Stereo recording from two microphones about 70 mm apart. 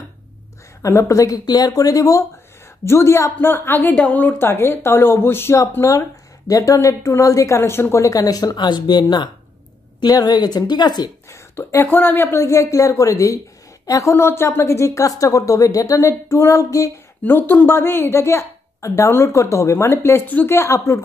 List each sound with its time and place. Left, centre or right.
0.8 s a woman's voice: left
1.4 s speech: left
2.8 s a woman's voice: left
3.3 s speech: left
5.8 s a woman's voice: left
9.9 s a woman's voice: left
11.2 s speech: left
12.4 s a woman's voice: left
14.1 s a woman's voice: left
17.2 s a woman's voice: left